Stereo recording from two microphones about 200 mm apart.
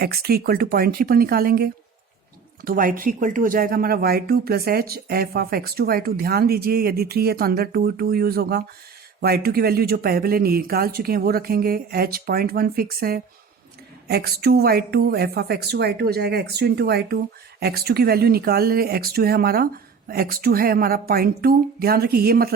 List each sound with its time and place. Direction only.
0.0 s speech: 50° right (ahead or behind)